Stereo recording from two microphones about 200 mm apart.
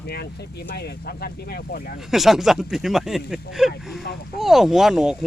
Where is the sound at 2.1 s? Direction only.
Centre (ahead or behind).